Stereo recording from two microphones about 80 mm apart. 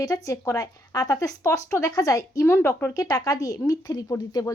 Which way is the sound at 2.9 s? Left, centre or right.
Left.